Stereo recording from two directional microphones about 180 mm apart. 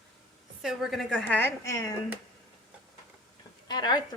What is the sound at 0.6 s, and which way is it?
A woman's voice, centre (ahead or behind).